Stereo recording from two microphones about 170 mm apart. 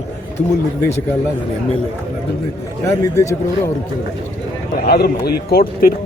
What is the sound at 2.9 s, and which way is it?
Speech, 20° left (ahead or behind).